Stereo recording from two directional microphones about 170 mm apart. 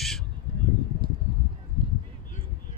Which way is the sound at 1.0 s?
30° right (ahead or behind).